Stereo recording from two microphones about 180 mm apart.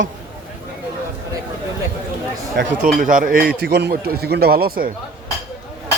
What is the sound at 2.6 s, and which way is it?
Speech, 75° right (ahead or behind).